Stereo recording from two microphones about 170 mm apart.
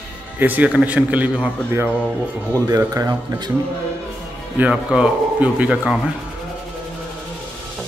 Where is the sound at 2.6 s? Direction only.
20° right (ahead or behind).